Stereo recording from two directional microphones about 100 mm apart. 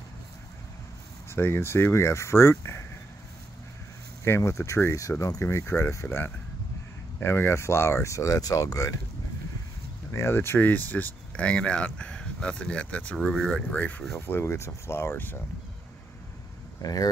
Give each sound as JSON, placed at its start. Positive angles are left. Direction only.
{"t": 1.3, "sound": "speech", "side_deg": 25}
{"t": 4.2, "sound": "speech", "side_deg": 30}
{"t": 10.1, "sound": "speech", "side_deg": 25}
{"t": 16.8, "sound": "speech", "side_deg": 35}